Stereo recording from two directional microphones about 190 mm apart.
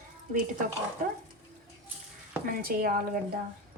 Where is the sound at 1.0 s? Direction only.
45° right (ahead or behind).